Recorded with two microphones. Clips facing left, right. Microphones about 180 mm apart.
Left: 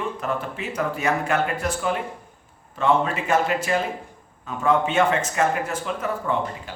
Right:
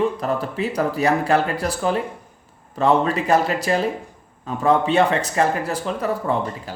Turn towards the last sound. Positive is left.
turn(degrees=-35)  # may be behind; listen again after turning